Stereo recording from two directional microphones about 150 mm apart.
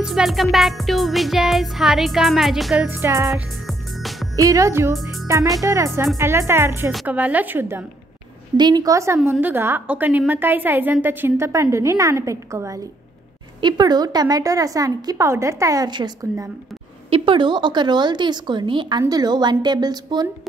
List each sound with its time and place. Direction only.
0.0 s music: centre (ahead or behind)
2.9 s a woman's voice: 15° right (ahead or behind)
3.6 s music: centre (ahead or behind)
4.4 s a woman's voice: 20° right (ahead or behind)
8.5 s a woman's voice: 30° right (ahead or behind)